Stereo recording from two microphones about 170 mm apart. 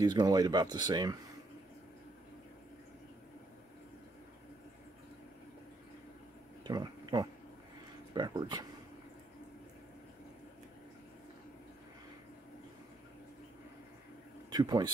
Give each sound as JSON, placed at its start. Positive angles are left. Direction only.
{"t": 0.0, "sound": "speech", "side_deg": -25}
{"t": 6.6, "sound": "a sound", "side_deg": -25}
{"t": 8.1, "sound": "speech", "side_deg": -25}
{"t": 14.5, "sound": "speech", "side_deg": -25}